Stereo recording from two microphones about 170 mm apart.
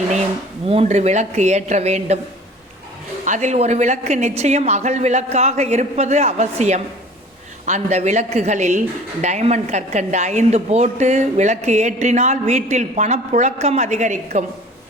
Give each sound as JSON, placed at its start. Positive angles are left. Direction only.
{"t": 0.7, "sound": "a woman's voice", "side_deg": -40}
{"t": 3.2, "sound": "a woman's voice", "side_deg": -45}